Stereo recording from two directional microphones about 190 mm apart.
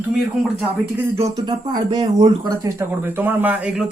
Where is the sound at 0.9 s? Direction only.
15° right (ahead or behind).